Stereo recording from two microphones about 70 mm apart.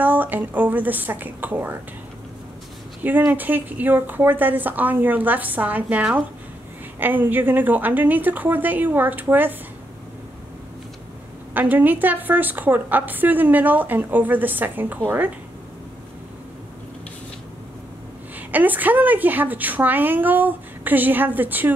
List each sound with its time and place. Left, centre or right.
0.0 s a woman's voice: right
3.0 s a woman's voice: right
11.5 s a woman's voice: right
18.5 s a woman's voice: right